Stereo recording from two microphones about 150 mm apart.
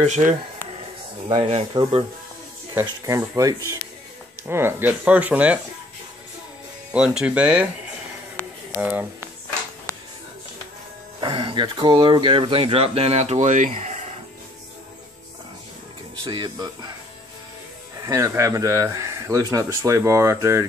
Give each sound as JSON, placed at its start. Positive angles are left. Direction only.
{"t": 0.0, "sound": "speech", "side_deg": -50}
{"t": 1.3, "sound": "speech", "side_deg": -40}
{"t": 2.7, "sound": "speech", "side_deg": -20}
{"t": 6.9, "sound": "speech", "side_deg": -5}
{"t": 8.4, "sound": "a sound", "side_deg": 10}
{"t": 8.7, "sound": "speech", "side_deg": -10}
{"t": 11.1, "sound": "speech", "side_deg": -30}
{"t": 13.7, "sound": "a sound", "side_deg": -50}
{"t": 16.3, "sound": "speech", "side_deg": -30}
{"t": 18.0, "sound": "speech", "side_deg": -20}